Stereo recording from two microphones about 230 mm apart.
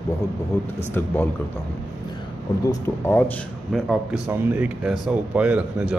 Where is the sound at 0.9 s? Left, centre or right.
Centre.